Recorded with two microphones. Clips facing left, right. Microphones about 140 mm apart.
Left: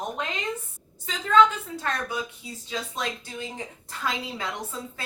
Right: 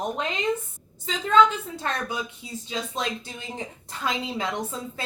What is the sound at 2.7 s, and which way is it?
Speech, 20° right (ahead or behind).